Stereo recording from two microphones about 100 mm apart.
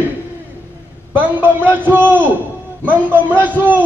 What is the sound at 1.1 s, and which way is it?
Speech, 20° right (ahead or behind).